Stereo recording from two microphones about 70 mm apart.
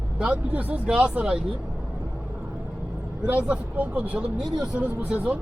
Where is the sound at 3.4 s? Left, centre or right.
Right.